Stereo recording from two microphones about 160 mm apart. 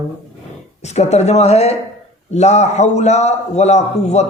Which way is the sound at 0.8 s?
45° left (ahead or behind).